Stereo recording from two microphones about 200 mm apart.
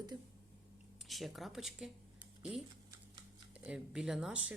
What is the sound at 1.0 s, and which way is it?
Speech, centre (ahead or behind).